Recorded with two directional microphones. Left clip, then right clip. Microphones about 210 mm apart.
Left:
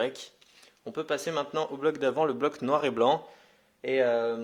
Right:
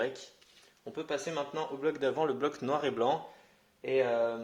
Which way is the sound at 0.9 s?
45° left (ahead or behind).